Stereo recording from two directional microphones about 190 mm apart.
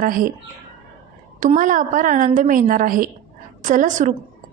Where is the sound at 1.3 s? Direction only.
40° right (ahead or behind).